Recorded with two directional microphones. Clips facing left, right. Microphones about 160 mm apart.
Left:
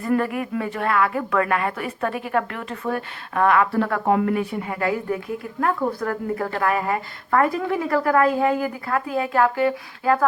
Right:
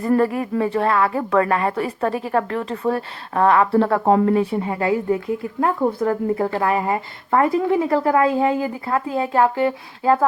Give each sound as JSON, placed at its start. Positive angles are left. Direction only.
{"t": 0.0, "sound": "a woman's voice", "side_deg": -30}